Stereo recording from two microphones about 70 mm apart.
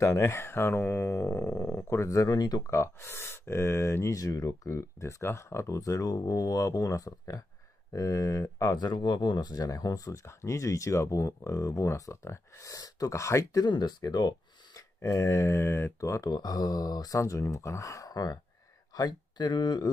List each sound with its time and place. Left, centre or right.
0.0 s speech: left
2.2 s speech: left
2.6 s speech: left
10.2 s speech: left
14.0 s a sound: left
15.0 s speech: left
16.0 s speech: left
17.2 s speech: left
18.9 s speech: left